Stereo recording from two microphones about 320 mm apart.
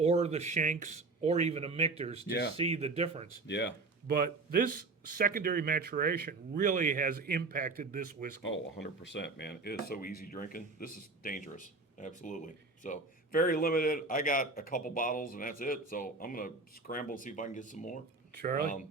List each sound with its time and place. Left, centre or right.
0.0 s speech: centre
2.2 s speech: left
2.6 s speech: centre
3.4 s speech: left
4.0 s speech: right
8.4 s speech: left
18.3 s speech: right